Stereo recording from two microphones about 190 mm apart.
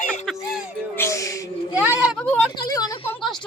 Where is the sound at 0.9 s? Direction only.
15° left (ahead or behind).